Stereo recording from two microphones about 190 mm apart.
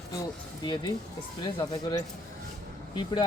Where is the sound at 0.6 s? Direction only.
20° left (ahead or behind).